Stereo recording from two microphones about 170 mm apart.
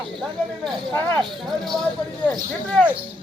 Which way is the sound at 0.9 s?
15° left (ahead or behind).